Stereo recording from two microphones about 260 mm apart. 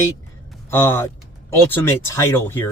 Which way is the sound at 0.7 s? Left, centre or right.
Centre.